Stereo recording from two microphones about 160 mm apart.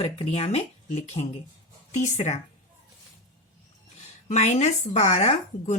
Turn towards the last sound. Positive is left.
turn(degrees=45)  # may be behind; listen again after turning